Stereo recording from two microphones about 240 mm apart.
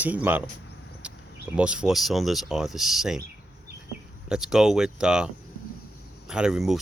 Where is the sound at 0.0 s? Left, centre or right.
Centre.